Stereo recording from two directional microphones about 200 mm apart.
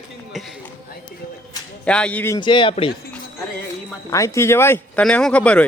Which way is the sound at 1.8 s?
5° left (ahead or behind).